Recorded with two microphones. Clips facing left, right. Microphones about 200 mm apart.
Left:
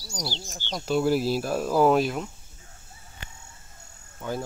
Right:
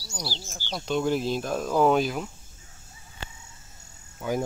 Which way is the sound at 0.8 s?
5° left (ahead or behind).